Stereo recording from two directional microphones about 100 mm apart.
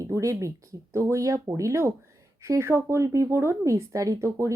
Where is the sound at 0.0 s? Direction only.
30° right (ahead or behind).